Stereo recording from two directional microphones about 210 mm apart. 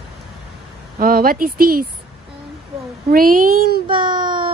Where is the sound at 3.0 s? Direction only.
45° right (ahead or behind).